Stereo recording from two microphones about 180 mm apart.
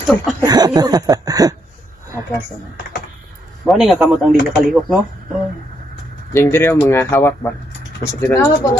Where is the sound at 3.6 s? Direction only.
Centre (ahead or behind).